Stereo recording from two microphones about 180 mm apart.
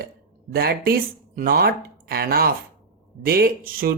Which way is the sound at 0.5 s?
60° right (ahead or behind).